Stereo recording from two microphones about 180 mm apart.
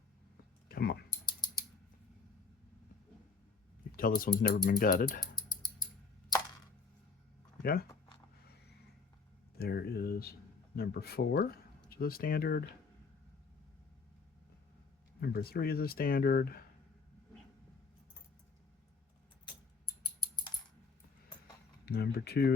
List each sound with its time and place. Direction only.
0.7 s typing: 60° left (ahead or behind)
1.2 s typing: 25° left (ahead or behind)
3.9 s speech: 50° left (ahead or behind)
7.6 s speech: 55° left (ahead or behind)
9.6 s speech: 60° left (ahead or behind)
15.2 s speech: 60° left (ahead or behind)
21.8 s speech: 60° left (ahead or behind)